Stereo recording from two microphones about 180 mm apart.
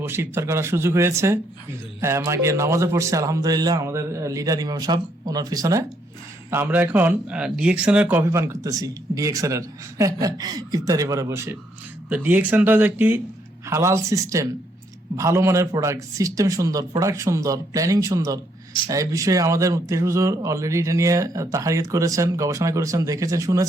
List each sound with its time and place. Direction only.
0.0 s speech: 15° right (ahead or behind)